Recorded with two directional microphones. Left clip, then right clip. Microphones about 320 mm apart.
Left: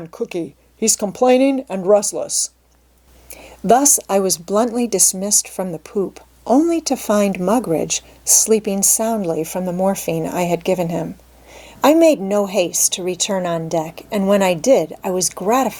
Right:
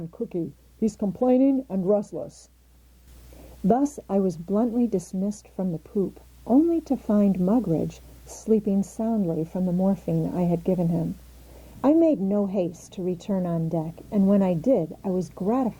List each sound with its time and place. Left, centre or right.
0.0 s speech: centre
3.7 s speech: centre
4.8 s speech: centre
5.8 s speech: centre